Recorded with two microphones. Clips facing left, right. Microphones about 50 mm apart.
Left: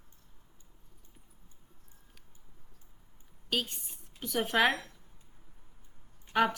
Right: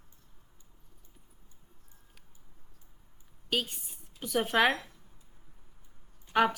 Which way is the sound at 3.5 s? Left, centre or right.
Centre.